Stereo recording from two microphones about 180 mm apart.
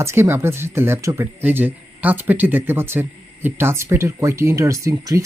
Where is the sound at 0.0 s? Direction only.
15° right (ahead or behind).